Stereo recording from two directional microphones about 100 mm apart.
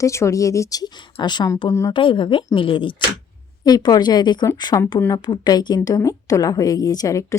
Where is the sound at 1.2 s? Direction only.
45° left (ahead or behind).